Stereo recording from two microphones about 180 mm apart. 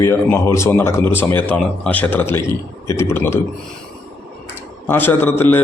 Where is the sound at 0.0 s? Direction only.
15° left (ahead or behind).